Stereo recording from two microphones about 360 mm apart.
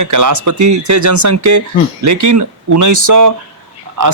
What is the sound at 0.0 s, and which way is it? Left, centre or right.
Speech, right.